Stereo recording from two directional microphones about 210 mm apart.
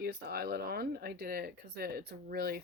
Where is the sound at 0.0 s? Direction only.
50° right (ahead or behind).